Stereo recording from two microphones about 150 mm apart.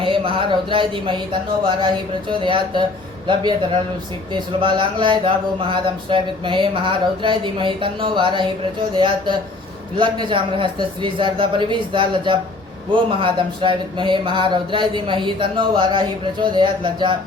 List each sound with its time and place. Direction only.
0.0 s speech: 35° right (ahead or behind)